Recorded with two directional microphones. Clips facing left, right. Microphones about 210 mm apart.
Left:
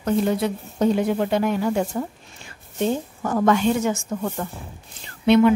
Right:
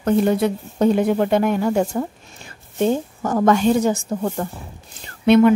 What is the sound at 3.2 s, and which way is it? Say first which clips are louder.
Speech: right 2 dB; 40° right (ahead or behind).